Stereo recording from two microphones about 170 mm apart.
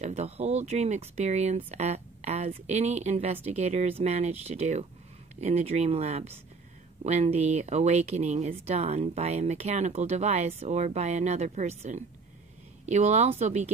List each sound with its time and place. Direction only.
0.0 s speech: 40° right (ahead or behind)